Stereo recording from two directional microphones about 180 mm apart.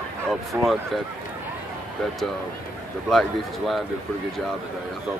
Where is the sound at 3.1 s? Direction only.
Centre (ahead or behind).